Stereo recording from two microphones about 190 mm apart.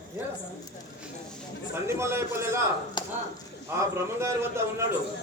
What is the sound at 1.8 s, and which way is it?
Speech, 15° right (ahead or behind).